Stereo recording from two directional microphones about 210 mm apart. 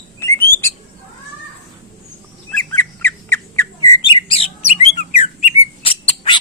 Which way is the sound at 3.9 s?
20° left (ahead or behind).